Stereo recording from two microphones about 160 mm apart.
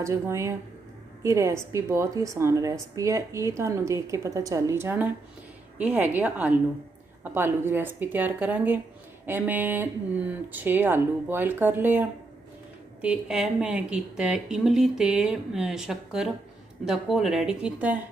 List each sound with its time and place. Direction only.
0.0 s a woman's voice: 20° right (ahead or behind)